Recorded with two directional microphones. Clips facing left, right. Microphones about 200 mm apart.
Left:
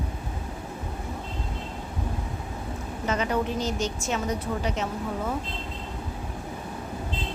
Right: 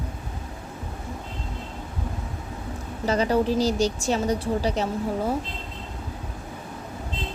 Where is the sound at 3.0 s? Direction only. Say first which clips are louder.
Right 5 dB; 35° right (ahead or behind).